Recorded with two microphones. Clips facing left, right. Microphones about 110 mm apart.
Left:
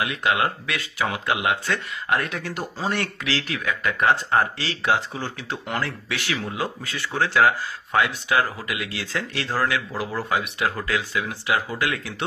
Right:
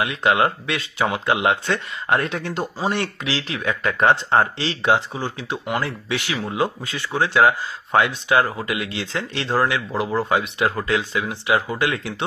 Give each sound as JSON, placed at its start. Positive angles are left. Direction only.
{"t": 0.0, "sound": "speech", "side_deg": -30}